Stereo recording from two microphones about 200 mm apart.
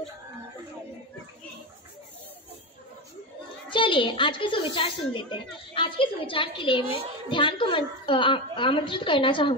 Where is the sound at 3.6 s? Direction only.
25° left (ahead or behind).